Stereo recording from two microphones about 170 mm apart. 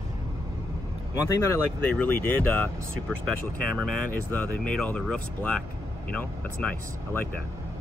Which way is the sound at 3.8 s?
5° left (ahead or behind).